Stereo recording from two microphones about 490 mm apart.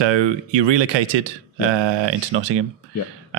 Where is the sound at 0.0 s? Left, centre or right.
Right.